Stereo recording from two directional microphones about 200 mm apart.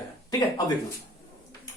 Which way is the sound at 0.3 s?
20° left (ahead or behind).